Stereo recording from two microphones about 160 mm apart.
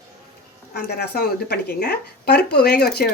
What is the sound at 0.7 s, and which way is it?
Speech, 85° left.